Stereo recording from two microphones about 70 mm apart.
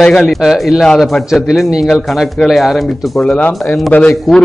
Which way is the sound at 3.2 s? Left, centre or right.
Centre.